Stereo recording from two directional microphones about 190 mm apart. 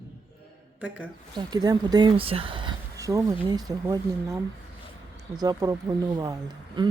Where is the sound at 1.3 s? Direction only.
20° right (ahead or behind).